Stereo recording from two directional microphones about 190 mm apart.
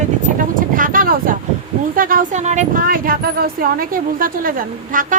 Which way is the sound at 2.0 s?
45° right (ahead or behind).